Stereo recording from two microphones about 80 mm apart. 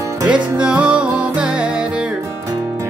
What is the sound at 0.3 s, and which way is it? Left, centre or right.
Music, centre.